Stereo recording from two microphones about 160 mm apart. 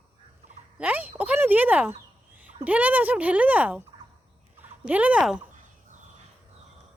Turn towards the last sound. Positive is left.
turn(degrees=-5)  # may be behind; listen again after turning